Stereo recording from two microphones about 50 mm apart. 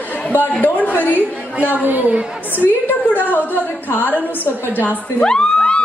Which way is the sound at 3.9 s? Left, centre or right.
Left.